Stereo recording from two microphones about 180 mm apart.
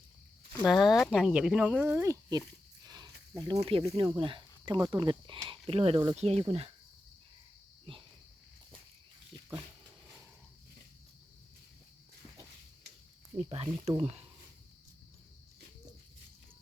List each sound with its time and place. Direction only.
0.6 s speech: centre (ahead or behind)
2.8 s snake: 20° right (ahead or behind)
3.3 s speech: 20° right (ahead or behind)
3.6 s speech: 35° right (ahead or behind)
7.9 s speech: 30° right (ahead or behind)
13.5 s speech: 35° right (ahead or behind)